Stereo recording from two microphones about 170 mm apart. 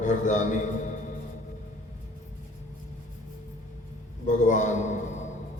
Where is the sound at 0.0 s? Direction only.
45° left (ahead or behind).